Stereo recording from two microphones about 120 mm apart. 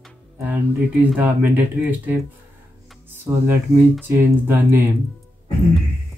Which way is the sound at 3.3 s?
20° right (ahead or behind).